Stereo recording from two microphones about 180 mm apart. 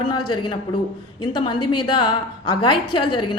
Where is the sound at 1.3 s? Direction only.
25° left (ahead or behind).